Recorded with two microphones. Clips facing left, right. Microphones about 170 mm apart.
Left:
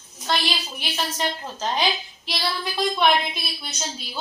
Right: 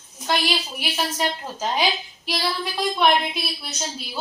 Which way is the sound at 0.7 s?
10° right (ahead or behind).